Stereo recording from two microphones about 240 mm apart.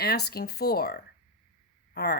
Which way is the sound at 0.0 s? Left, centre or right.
Left.